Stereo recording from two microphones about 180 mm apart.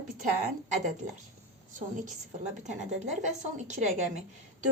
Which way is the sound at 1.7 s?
45° right (ahead or behind).